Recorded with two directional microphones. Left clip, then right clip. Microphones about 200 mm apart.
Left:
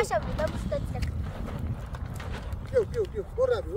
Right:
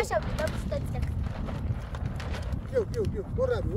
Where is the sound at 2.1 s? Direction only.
30° right (ahead or behind).